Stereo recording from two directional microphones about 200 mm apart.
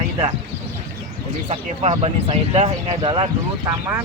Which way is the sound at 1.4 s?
30° right (ahead or behind).